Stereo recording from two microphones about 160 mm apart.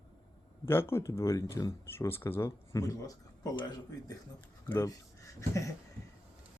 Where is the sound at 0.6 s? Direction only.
15° left (ahead or behind).